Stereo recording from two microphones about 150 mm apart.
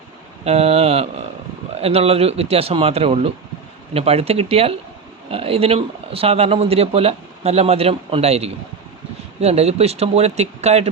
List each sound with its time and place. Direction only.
0.4 s speech: 45° right (ahead or behind)